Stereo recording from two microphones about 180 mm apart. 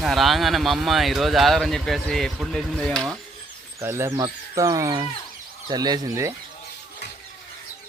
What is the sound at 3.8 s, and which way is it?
Speech, 15° right (ahead or behind).